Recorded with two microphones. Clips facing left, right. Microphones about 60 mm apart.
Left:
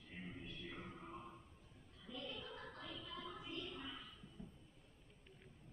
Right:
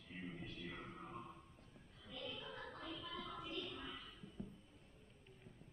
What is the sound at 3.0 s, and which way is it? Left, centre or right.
Music, right.